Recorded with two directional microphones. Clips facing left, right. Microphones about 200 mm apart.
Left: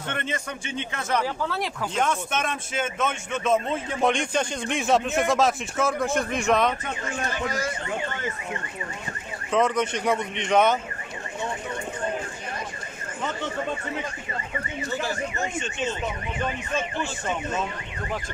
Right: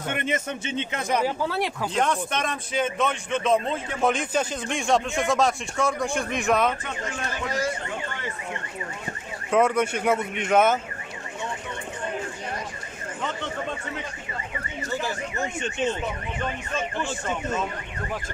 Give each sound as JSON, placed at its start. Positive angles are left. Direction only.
{"t": 0.1, "sound": "speech", "side_deg": -20}
{"t": 2.0, "sound": "speech", "side_deg": 0}
{"t": 9.5, "sound": "speech", "side_deg": -10}